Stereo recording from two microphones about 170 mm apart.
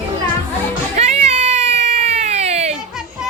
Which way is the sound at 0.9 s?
40° right (ahead or behind).